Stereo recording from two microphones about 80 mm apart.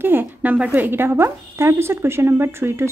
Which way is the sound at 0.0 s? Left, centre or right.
Right.